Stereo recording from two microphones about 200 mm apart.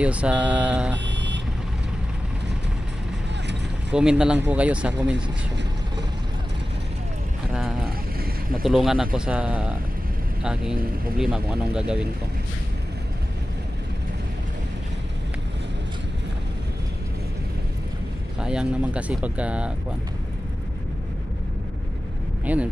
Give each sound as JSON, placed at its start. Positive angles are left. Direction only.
{"t": 0.0, "sound": "speech", "side_deg": -5}
{"t": 0.9, "sound": "vehicle", "side_deg": -60}
{"t": 3.9, "sound": "speech", "side_deg": -5}
{"t": 8.6, "sound": "speech", "side_deg": 0}
{"t": 18.4, "sound": "speech", "side_deg": -5}
{"t": 22.4, "sound": "speech", "side_deg": -10}